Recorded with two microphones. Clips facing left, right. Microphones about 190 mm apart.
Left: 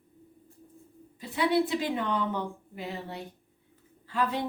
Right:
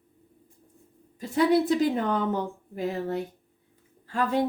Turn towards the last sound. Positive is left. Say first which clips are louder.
# right 4 dB
turn(degrees=-45)  # may be behind; listen again after turning